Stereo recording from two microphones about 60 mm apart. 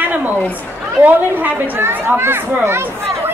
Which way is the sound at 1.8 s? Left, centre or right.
Right.